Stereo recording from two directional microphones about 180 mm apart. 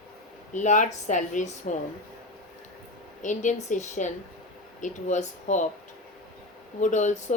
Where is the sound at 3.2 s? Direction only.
45° left (ahead or behind).